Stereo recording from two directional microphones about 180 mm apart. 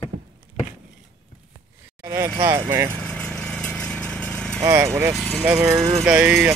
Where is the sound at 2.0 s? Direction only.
15° right (ahead or behind).